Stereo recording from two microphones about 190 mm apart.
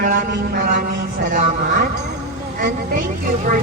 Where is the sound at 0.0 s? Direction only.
45° right (ahead or behind).